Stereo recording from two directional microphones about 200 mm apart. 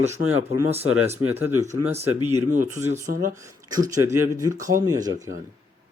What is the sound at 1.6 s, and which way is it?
Speech, 30° right (ahead or behind).